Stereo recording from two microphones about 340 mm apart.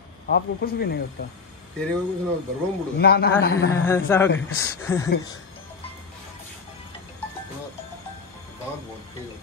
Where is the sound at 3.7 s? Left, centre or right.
Centre.